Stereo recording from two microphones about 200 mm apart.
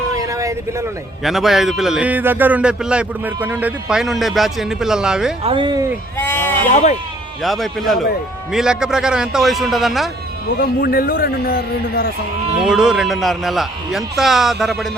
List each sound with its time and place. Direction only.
0.2 s vehicle: 15° right (ahead or behind)
1.2 s a man's voice: centre (ahead or behind)
5.4 s speech: 25° right (ahead or behind)
6.1 s sheep: 10° left (ahead or behind)
6.7 s speech: 40° left (ahead or behind)
7.4 s a man's voice: centre (ahead or behind)
10.6 s a man's voice: 50° left (ahead or behind)
12.6 s a man's voice: 5° right (ahead or behind)